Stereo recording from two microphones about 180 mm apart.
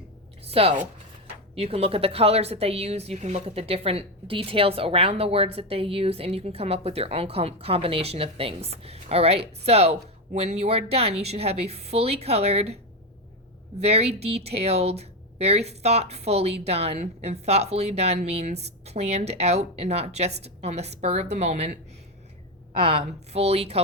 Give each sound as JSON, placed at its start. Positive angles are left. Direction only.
{"t": 0.5, "sound": "speech", "side_deg": -35}